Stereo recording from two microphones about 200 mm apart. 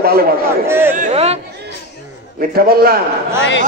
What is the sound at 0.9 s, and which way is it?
Speech, 35° right (ahead or behind).